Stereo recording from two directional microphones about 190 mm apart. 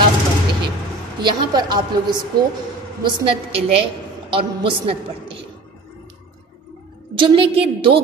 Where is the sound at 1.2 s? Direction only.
20° right (ahead or behind).